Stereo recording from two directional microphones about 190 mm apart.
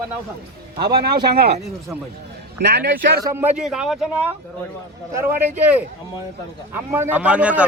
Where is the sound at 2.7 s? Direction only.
55° right (ahead or behind).